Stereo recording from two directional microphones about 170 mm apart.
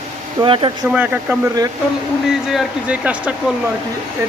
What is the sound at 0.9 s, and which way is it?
Speech, 10° right (ahead or behind).